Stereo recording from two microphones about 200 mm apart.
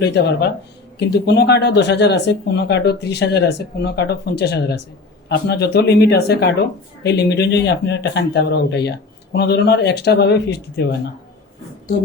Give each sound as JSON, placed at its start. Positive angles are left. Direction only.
{"t": 0.0, "sound": "a man's voice", "side_deg": 55}